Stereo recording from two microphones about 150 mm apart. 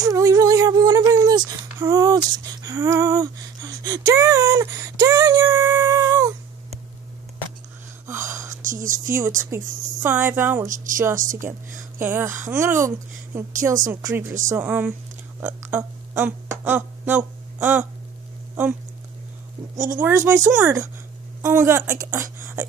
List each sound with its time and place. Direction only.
0.0 s speech: 20° right (ahead or behind)
8.1 s whispering: 15° right (ahead or behind)
8.6 s speech: 60° right (ahead or behind)
9.5 s a woman's voice: 10° right (ahead or behind)
11.1 s speech: 60° right (ahead or behind)
12.0 s a woman's voice: 15° right (ahead or behind)
19.9 s a woman's voice: 15° right (ahead or behind)